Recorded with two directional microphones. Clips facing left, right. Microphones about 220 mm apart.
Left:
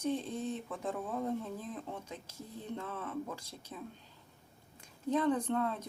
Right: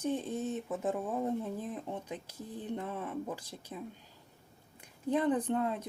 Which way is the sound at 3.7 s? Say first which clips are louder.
Right 3 dB; 20° right (ahead or behind).